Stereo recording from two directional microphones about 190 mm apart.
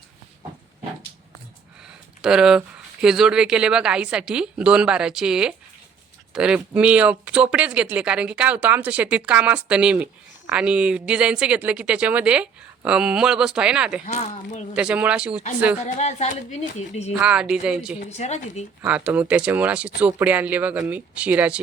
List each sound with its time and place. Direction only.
2.2 s speech: 5° right (ahead or behind)
14.0 s a woman's voice: 35° left (ahead or behind)
14.8 s speech: 5° right (ahead or behind)
15.8 s a woman's voice: 35° left (ahead or behind)
17.2 s speech: 5° right (ahead or behind)
18.0 s a woman's voice: 35° left (ahead or behind)
18.8 s speech: 10° right (ahead or behind)